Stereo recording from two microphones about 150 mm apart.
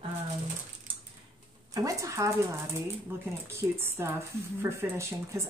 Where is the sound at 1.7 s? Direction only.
20° right (ahead or behind).